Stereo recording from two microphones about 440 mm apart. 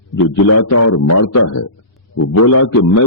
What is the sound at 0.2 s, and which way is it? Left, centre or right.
A man's voice, left.